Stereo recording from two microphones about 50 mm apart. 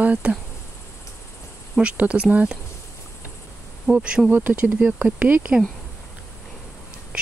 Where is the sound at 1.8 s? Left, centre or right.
Right.